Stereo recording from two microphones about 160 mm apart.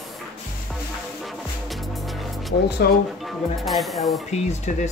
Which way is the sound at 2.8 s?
75° left (ahead or behind).